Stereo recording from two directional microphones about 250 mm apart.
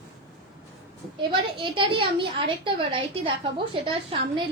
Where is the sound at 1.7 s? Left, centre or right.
Right.